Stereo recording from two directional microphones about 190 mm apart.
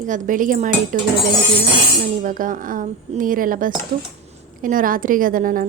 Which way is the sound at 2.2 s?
45° right (ahead or behind).